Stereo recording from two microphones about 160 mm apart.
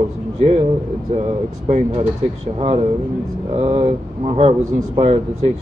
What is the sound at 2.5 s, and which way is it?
Speech, 40° right (ahead or behind).